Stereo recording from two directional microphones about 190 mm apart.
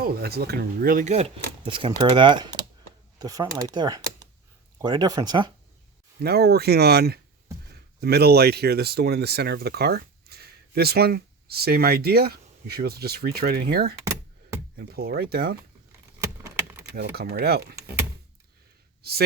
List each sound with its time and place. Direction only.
0.0 s speech: 55° right (ahead or behind); by 5.5 s 20° right (ahead or behind)
6.1 s speech: 55° right (ahead or behind)
16.2 s keys jangling: 15° right (ahead or behind)
16.9 s speech: 55° right (ahead or behind)
17.7 s power windows: 10° right (ahead or behind)